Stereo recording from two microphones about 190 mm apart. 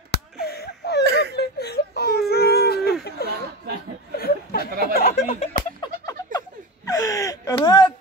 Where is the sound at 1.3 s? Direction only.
55° left (ahead or behind).